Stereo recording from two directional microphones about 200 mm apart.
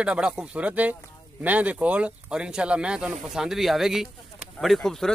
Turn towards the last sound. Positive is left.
turn(degrees=0)  # may be behind; listen again after turning